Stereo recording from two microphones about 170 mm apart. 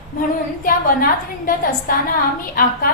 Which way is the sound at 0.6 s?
55° left (ahead or behind).